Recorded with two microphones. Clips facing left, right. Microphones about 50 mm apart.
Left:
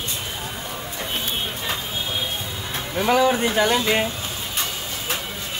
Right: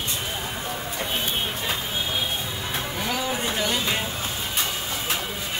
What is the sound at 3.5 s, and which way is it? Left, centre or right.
Speech, left.